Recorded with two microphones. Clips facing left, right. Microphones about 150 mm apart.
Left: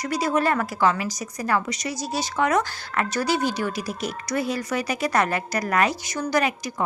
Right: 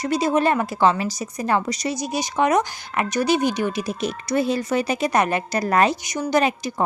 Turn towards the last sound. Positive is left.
turn(degrees=-25)  # may be behind; listen again after turning